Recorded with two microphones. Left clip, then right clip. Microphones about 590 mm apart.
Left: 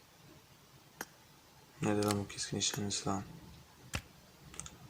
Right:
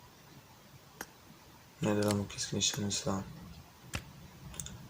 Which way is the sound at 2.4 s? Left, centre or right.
Left.